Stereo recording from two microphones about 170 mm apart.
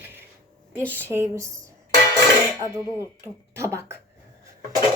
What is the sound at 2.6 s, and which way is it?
Speech, 15° right (ahead or behind).